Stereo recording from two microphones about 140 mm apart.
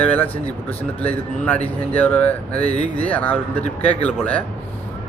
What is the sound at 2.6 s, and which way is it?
Speech, 50° left (ahead or behind).